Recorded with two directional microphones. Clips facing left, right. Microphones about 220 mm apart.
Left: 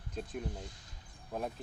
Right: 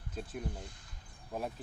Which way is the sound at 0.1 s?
5° right (ahead or behind).